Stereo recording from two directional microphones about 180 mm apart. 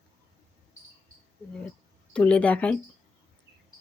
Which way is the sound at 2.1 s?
5° left (ahead or behind).